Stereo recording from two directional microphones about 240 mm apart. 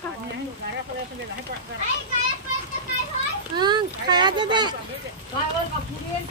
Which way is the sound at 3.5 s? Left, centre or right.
Centre.